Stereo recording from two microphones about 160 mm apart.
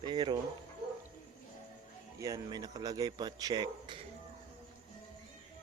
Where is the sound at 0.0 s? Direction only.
30° right (ahead or behind).